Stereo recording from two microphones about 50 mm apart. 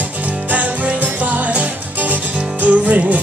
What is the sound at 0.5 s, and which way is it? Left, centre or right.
Music, right.